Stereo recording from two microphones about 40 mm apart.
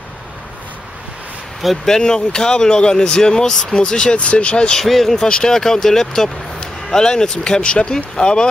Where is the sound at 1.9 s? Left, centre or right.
Centre.